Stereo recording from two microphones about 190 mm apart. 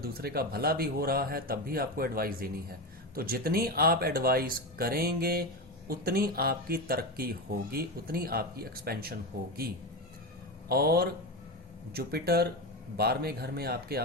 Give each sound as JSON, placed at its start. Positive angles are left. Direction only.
{"t": 0.0, "sound": "speech", "side_deg": -55}
{"t": 10.7, "sound": "speech", "side_deg": -55}